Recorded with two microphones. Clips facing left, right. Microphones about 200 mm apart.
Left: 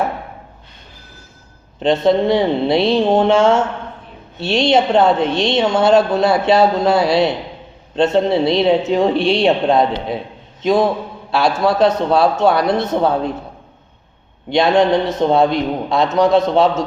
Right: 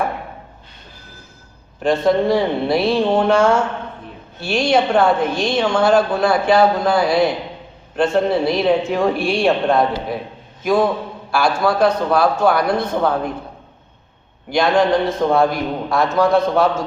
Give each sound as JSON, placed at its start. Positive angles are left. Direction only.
{"t": 1.8, "sound": "a woman's voice", "side_deg": 20}
{"t": 14.5, "sound": "a woman's voice", "side_deg": 25}